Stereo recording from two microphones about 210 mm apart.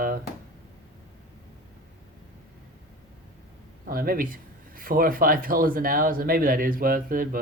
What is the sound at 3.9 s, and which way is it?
Speech, 45° right (ahead or behind).